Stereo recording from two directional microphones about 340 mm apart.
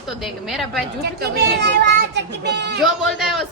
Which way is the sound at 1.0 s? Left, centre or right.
Right.